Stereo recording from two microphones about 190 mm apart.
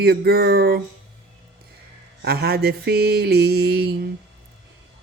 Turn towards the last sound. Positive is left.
turn(degrees=-55)  # may be behind; listen again after turning